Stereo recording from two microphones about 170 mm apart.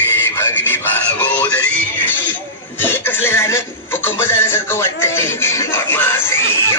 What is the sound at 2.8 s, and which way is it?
Speech, 10° left (ahead or behind).